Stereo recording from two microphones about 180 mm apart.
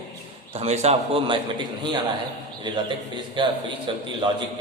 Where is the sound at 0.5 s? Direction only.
35° right (ahead or behind).